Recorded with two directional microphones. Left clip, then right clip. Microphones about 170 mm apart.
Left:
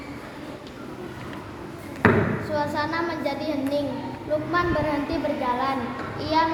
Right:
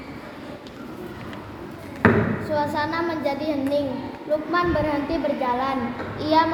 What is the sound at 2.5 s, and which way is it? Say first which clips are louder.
A child's voice: right 2 dB; 50° right (ahead or behind).